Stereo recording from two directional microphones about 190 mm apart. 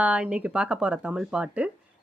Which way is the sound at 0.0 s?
5° right (ahead or behind).